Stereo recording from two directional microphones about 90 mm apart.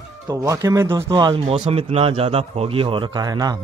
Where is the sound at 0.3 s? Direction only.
40° right (ahead or behind).